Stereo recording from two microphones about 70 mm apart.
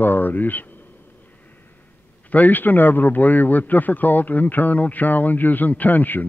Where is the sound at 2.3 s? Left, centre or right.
Left.